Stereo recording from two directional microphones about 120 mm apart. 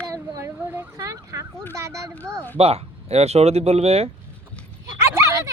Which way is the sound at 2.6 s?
60° right (ahead or behind).